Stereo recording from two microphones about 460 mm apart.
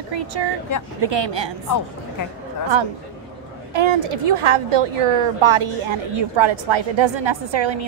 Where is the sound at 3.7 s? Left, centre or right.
Right.